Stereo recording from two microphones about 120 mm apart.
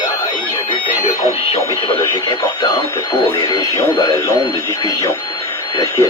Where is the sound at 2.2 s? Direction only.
35° left (ahead or behind).